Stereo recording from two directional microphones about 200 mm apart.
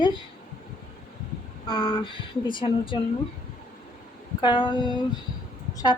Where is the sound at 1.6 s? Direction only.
25° left (ahead or behind).